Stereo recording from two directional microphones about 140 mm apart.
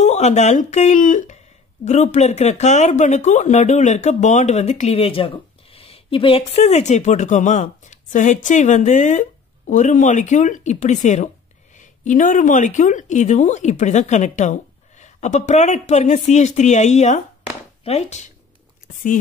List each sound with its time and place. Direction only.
0.0 s speech: 55° left (ahead or behind)